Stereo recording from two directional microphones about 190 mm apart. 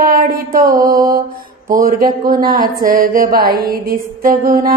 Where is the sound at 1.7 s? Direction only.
50° right (ahead or behind).